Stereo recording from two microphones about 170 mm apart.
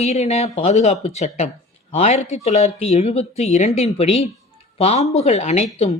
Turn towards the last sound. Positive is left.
turn(degrees=40)  # may be behind; listen again after turning